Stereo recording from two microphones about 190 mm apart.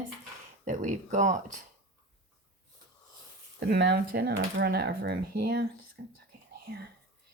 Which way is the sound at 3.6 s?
60° right (ahead or behind).